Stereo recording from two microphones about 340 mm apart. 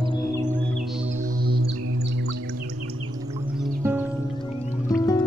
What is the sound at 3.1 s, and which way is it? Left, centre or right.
Music, centre.